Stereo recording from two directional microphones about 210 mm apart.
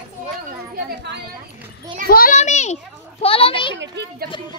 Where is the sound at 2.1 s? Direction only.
40° left (ahead or behind).